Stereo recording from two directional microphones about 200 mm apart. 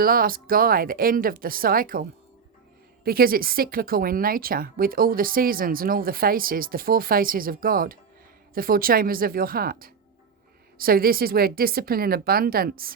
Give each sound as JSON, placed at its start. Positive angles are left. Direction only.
{"t": 0.0, "sound": "speech", "side_deg": -45}